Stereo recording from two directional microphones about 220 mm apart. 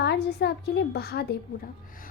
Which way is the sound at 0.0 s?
50° left (ahead or behind).